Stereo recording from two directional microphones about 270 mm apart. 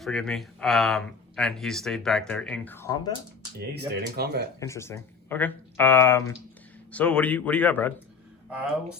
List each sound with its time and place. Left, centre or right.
0.0 s speech: centre
3.8 s speech: right
4.6 s speech: centre